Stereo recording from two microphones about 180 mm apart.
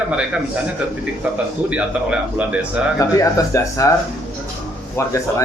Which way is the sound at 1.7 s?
5° right (ahead or behind).